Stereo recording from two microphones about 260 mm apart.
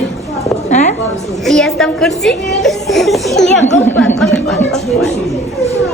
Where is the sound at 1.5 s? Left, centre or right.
Centre.